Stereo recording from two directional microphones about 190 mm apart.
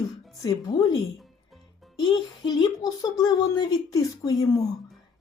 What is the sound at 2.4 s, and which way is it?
Speech, 25° left (ahead or behind).